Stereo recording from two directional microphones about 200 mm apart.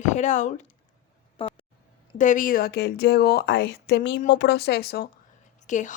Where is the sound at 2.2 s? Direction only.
40° left (ahead or behind).